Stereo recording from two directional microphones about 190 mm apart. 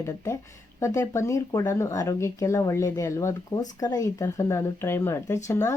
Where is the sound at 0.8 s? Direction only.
15° left (ahead or behind).